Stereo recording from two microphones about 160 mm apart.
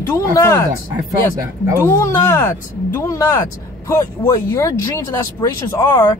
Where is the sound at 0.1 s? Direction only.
20° left (ahead or behind).